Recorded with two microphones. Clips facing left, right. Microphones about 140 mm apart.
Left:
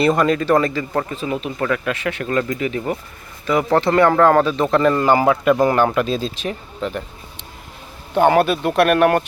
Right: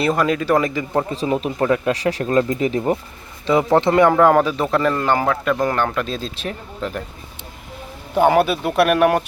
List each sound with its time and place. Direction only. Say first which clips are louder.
0.0 s speech: left 2 dB; 5° right (ahead or behind)
1.1 s speech: right 3 dB; 35° right (ahead or behind); by 7.0 s centre (ahead or behind)
8.1 s speech: left 1 dB; 5° right (ahead or behind)